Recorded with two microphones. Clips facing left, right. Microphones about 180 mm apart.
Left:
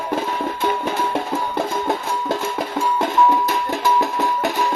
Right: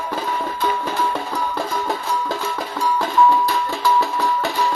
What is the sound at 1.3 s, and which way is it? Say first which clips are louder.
Music: left 2 dB; 25° left (ahead or behind).